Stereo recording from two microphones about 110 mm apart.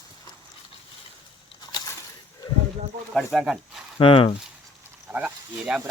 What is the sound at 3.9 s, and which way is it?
Speech, 55° left (ahead or behind).